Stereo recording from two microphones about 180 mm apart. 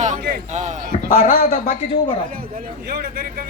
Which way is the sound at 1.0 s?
45° left (ahead or behind).